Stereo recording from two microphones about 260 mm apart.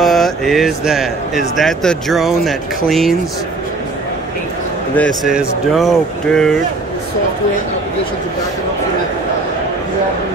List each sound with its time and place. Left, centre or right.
0.0 s speech: centre
5.3 s speech: centre